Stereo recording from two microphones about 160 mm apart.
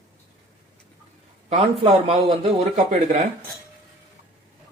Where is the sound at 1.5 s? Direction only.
40° right (ahead or behind).